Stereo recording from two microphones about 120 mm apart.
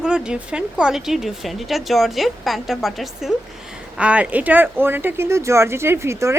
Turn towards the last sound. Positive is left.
turn(degrees=-20)  # may be behind; listen again after turning